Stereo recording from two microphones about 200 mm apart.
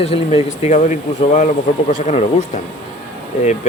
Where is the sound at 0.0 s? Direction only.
30° left (ahead or behind).